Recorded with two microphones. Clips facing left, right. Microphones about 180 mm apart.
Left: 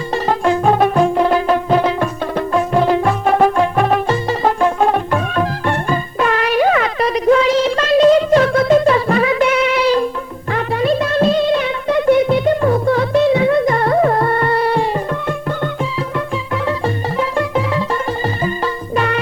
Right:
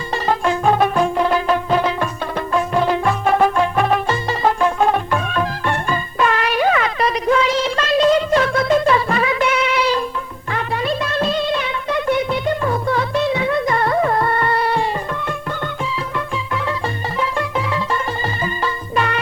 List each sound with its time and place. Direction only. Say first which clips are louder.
0.1 s music: left 3 dB; 40° left (ahead or behind)